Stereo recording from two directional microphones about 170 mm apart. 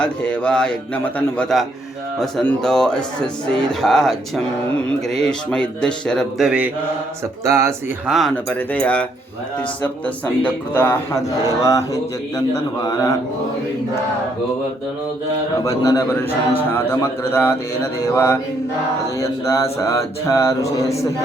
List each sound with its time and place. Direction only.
0.0 s mantra: 5° left (ahead or behind)
2.1 s speech: 5° left (ahead or behind)
7.4 s speech: 15° right (ahead or behind)
8.0 s speech: centre (ahead or behind)
8.4 s mantra: 10° left (ahead or behind)
11.6 s a man's voice: 20° left (ahead or behind)
15.6 s a man's voice: 20° left (ahead or behind)
16.7 s mantra: 15° left (ahead or behind)